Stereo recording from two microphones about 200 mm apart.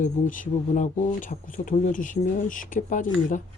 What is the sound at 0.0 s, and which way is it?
Speech, 40° left (ahead or behind).